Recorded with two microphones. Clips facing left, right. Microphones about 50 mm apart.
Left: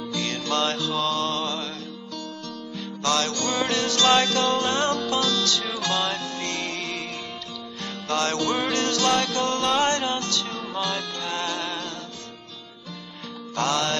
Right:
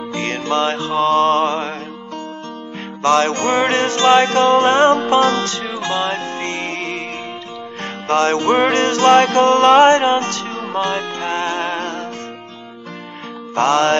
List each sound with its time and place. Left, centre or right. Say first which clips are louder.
0.1 s music: right 7 dB; right
3.0 s music: right 10 dB; right
13.6 s music: right 10 dB; right